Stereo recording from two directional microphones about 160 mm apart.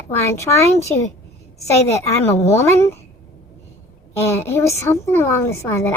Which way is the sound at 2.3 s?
45° left (ahead or behind).